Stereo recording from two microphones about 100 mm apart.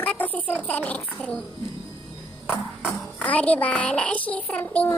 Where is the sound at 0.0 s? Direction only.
15° left (ahead or behind).